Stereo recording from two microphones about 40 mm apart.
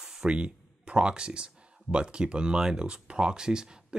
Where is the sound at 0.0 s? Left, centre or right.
Centre.